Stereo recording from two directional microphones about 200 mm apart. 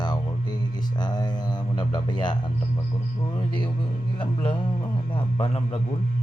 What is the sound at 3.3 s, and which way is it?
A man's voice, 25° left (ahead or behind).